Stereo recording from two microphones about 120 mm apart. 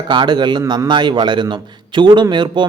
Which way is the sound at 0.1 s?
40° right (ahead or behind).